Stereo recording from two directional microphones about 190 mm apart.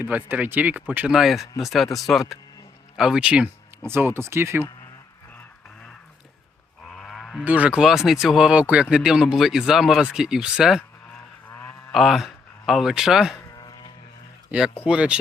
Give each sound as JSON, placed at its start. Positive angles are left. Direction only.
{"t": 0.0, "sound": "speech", "side_deg": -10}
{"t": 6.8, "sound": "a sound", "side_deg": 5}
{"t": 7.4, "sound": "speech", "side_deg": -10}
{"t": 11.4, "sound": "a sound", "side_deg": 10}
{"t": 11.9, "sound": "speech", "side_deg": 0}
{"t": 13.3, "sound": "vehicle", "side_deg": 20}
{"t": 14.5, "sound": "speech", "side_deg": -5}